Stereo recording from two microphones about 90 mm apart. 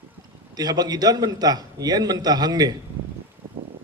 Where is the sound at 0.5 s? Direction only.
45° right (ahead or behind).